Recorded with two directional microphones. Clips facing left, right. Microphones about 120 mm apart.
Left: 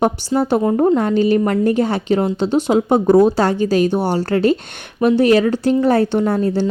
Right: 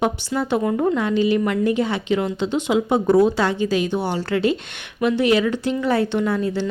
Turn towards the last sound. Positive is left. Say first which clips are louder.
# left 5 dB
turn(degrees=40)  # may be behind; listen again after turning